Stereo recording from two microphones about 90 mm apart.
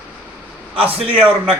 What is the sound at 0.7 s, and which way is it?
Speech, 15° right (ahead or behind).